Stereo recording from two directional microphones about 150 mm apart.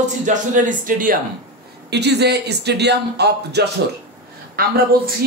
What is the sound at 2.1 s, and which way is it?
A man's voice, 90° right.